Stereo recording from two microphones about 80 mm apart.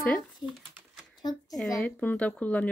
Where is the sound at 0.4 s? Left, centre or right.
Left.